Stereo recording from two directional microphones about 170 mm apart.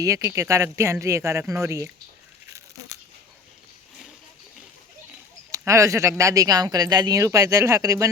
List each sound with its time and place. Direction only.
0.0 s speech: 20° right (ahead or behind)
5.5 s speech: 20° right (ahead or behind)